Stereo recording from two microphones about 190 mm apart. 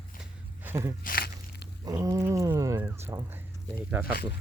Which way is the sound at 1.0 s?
50° left (ahead or behind).